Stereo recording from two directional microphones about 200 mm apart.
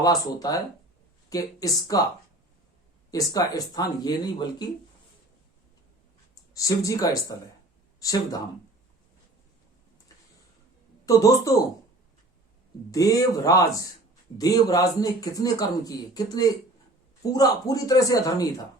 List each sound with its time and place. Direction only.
0.0 s speech: 20° left (ahead or behind)
3.1 s speech: 15° left (ahead or behind)
6.3 s speech: 15° left (ahead or behind)
11.0 s speech: 15° left (ahead or behind)
12.9 s speech: 15° left (ahead or behind)